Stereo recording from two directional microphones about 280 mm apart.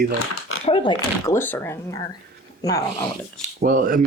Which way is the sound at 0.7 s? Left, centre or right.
Centre.